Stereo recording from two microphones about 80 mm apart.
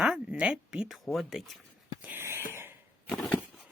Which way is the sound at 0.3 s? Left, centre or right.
Centre.